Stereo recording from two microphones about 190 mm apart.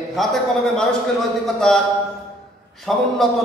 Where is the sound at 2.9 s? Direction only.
Centre (ahead or behind).